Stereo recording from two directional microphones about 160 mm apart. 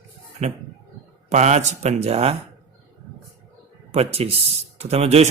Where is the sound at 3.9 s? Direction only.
40° right (ahead or behind).